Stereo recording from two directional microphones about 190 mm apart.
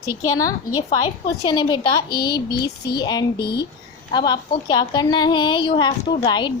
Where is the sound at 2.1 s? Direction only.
55° left (ahead or behind).